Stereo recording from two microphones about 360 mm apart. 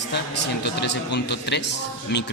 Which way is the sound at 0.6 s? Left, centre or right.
Left.